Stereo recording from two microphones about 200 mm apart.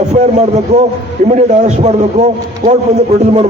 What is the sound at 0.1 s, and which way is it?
A man's voice, 35° right (ahead or behind).